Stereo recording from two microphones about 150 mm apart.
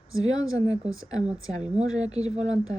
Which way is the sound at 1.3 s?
10° right (ahead or behind).